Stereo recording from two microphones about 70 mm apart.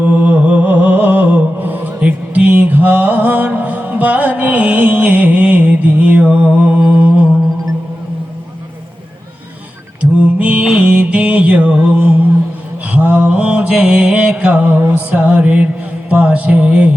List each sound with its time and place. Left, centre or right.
0.0 s music: right
6.2 s mantra: centre
10.0 s mantra: centre
14.8 s music: right
15.1 s mantra: centre
16.0 s a sound: right